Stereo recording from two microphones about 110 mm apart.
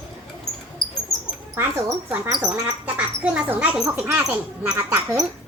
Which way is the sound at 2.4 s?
10° right (ahead or behind).